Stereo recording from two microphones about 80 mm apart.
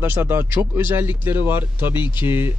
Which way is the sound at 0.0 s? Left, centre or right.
Right.